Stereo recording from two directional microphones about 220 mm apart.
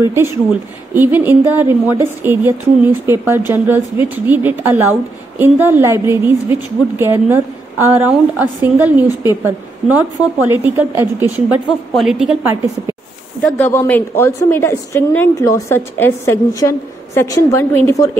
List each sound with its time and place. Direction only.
0.0 s a woman's voice: 10° right (ahead or behind)
13.4 s a woman's voice: 10° left (ahead or behind)